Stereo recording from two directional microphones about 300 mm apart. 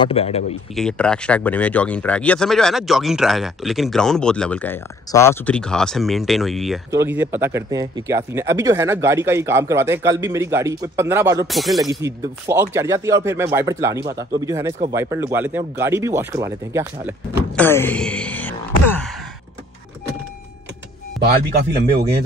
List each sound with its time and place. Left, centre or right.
0.0 s speech: centre
0.7 s speech: centre
11.4 s speech: centre
17.6 s speech: centre